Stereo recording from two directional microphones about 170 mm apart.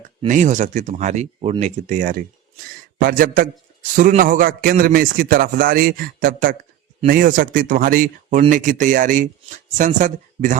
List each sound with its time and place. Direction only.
0.3 s a man's voice: 45° right (ahead or behind)